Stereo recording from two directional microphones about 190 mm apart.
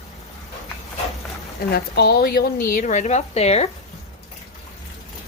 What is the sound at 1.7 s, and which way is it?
Speech, 60° left (ahead or behind).